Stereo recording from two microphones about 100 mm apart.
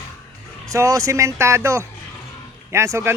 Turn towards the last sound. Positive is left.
turn(degrees=-25)  # may be behind; listen again after turning